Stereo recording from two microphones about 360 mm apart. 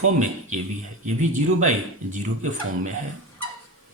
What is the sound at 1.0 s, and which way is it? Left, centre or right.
Speech, centre.